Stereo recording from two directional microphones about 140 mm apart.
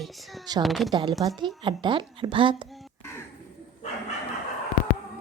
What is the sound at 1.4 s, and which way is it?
A woman's voice, 35° right (ahead or behind).